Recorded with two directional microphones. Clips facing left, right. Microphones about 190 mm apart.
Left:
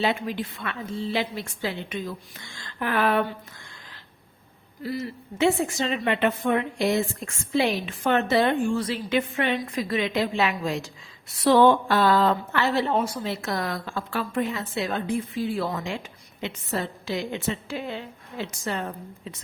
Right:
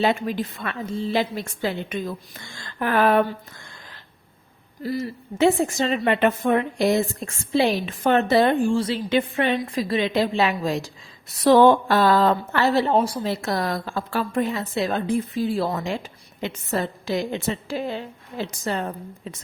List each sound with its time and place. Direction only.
0.0 s a woman's voice: 45° right (ahead or behind)
4.8 s a woman's voice: 40° right (ahead or behind)